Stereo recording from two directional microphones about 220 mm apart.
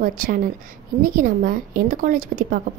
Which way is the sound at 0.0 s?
40° right (ahead or behind).